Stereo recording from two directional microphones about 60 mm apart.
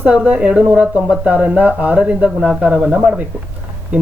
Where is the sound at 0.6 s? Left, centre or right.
Right.